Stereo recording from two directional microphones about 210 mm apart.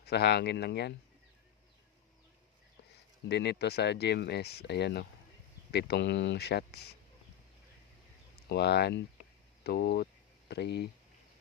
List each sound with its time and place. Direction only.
0.0 s speech: 50° left (ahead or behind)
3.2 s speech: 50° left (ahead or behind)
8.4 s speech: 50° left (ahead or behind)